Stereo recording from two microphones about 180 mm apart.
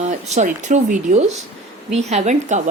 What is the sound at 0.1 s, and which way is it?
Speech, 40° right (ahead or behind).